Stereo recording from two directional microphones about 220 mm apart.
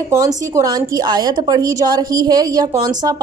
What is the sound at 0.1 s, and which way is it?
A woman's voice, 15° right (ahead or behind).